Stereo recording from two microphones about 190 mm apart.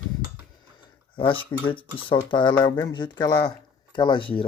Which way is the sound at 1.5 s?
20° left (ahead or behind).